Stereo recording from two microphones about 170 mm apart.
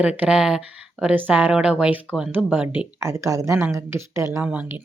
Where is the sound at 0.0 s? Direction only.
10° right (ahead or behind).